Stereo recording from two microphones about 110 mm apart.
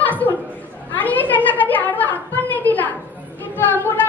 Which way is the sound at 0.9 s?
15° left (ahead or behind).